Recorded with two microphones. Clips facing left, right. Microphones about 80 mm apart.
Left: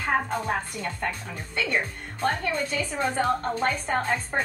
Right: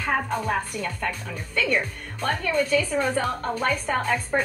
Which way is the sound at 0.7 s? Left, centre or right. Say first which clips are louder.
Right 2 dB; left.